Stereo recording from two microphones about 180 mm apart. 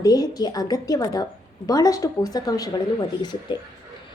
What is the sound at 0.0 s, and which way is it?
A woman's voice, 20° left (ahead or behind).